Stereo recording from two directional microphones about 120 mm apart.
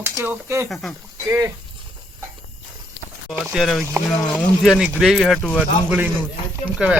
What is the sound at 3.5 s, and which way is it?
Speech, centre (ahead or behind).